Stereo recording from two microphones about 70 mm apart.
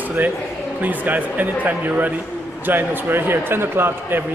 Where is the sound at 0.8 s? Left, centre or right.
Right.